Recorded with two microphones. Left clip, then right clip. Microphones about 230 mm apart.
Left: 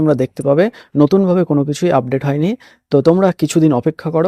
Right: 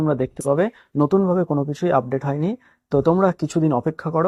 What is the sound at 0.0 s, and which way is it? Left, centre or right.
Speech, left.